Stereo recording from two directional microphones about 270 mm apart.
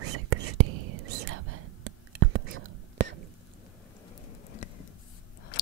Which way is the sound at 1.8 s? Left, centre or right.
Right.